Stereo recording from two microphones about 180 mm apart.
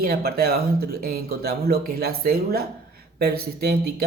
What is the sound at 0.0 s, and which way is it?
Speech, 60° right (ahead or behind).